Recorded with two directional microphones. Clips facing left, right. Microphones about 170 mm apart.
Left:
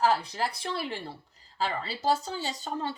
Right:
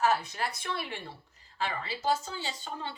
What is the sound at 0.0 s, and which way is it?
Speech, 30° left (ahead or behind).